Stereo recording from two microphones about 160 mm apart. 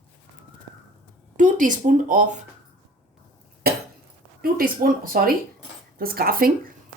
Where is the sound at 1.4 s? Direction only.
55° right (ahead or behind).